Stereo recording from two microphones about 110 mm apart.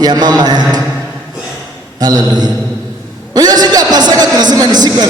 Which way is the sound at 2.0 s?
40° right (ahead or behind).